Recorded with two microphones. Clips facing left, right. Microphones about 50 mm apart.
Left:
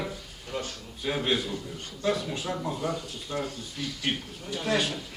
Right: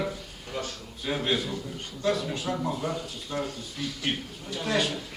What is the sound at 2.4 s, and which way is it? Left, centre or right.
A man's voice, centre.